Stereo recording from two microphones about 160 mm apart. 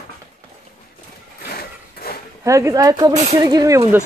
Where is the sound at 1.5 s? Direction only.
70° left (ahead or behind).